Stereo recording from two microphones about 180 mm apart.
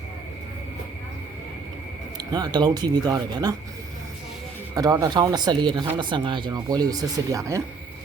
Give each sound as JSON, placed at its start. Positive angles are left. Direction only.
{"t": 2.3, "sound": "speech", "side_deg": -25}
{"t": 4.7, "sound": "speech", "side_deg": -20}